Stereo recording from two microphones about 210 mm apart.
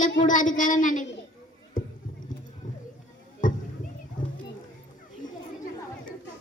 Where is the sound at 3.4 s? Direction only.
40° left (ahead or behind).